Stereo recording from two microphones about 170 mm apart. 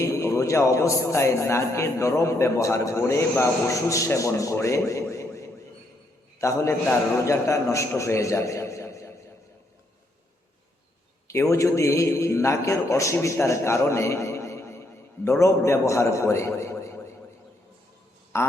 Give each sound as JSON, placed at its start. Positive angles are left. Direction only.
{"t": 0.0, "sound": "a man's voice", "side_deg": 15}
{"t": 11.3, "sound": "a man's voice", "side_deg": 15}
{"t": 18.3, "sound": "a sound", "side_deg": 15}